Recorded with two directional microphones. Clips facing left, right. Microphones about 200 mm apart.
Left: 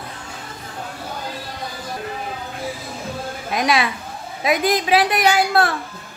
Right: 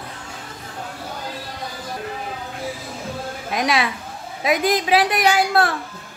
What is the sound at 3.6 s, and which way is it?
A woman's voice, 15° right (ahead or behind).